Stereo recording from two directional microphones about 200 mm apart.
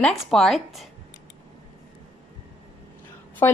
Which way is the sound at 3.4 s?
10° left (ahead or behind).